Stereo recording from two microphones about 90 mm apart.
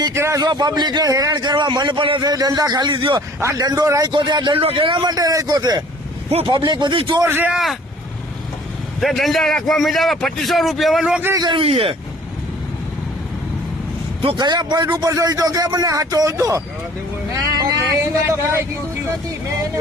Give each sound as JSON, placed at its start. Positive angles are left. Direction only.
{"t": 0.1, "sound": "a man's voice", "side_deg": -30}
{"t": 0.3, "sound": "a man's voice", "side_deg": -50}
{"t": 2.2, "sound": "a man's voice", "side_deg": -45}
{"t": 3.2, "sound": "a man's voice", "side_deg": -45}
{"t": 4.1, "sound": "a man's voice", "side_deg": -55}
{"t": 6.3, "sound": "a man's voice", "side_deg": -70}
{"t": 6.7, "sound": "a man's voice", "side_deg": -55}
{"t": 7.3, "sound": "a man's voice", "side_deg": -25}
{"t": 7.5, "sound": "a man's voice", "side_deg": 0}
{"t": 9.0, "sound": "a man's voice", "side_deg": 0}
{"t": 11.5, "sound": "speech", "side_deg": -90}
{"t": 14.2, "sound": "a man's voice", "side_deg": -65}
{"t": 15.0, "sound": "a man's voice", "side_deg": -45}
{"t": 18.0, "sound": "a man's voice", "side_deg": -30}